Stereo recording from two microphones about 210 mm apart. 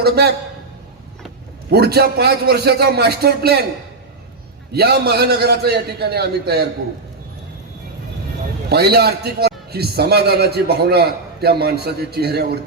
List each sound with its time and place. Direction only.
0.0 s a man's voice: 50° right (ahead or behind)
1.7 s a man's voice: 50° right (ahead or behind)
4.7 s a man's voice: 50° right (ahead or behind)
8.7 s a man's voice: 50° right (ahead or behind)